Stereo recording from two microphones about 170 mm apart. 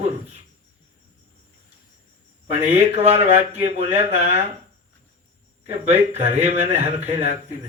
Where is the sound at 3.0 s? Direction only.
35° right (ahead or behind).